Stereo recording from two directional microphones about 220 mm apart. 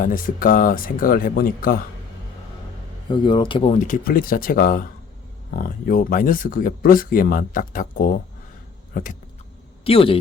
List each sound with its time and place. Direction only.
0.0 s speech: 40° left (ahead or behind)
3.1 s speech: 20° left (ahead or behind); by 8.1 s 40° left (ahead or behind)
8.9 s a sound: 40° left (ahead or behind)
9.8 s a man's voice: 25° left (ahead or behind)